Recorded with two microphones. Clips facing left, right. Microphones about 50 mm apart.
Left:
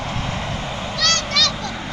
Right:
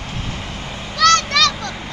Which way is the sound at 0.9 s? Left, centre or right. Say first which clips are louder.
Right 8 dB; right.